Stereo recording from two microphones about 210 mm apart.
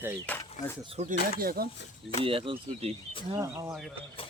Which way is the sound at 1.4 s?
45° right (ahead or behind).